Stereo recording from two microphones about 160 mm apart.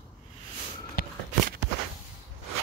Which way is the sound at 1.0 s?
60° left (ahead or behind).